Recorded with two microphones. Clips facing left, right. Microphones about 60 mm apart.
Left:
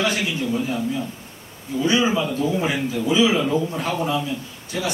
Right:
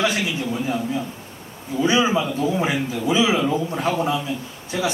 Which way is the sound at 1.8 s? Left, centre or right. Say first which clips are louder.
Right 1 dB; right.